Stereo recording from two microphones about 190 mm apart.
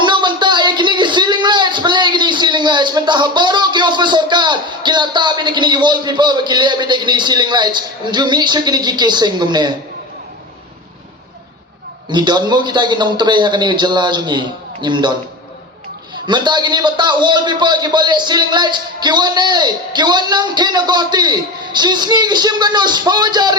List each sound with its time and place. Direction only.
0.0 s a sound: 25° right (ahead or behind)
12.0 s a man's voice: 25° right (ahead or behind)
16.2 s a man's voice: 25° right (ahead or behind)